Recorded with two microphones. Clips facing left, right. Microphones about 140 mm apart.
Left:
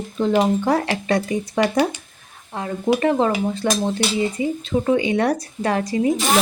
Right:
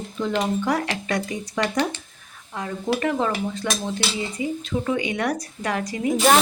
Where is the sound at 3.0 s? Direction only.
35° left (ahead or behind).